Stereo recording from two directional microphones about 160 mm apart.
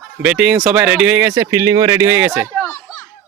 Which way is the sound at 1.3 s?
20° right (ahead or behind).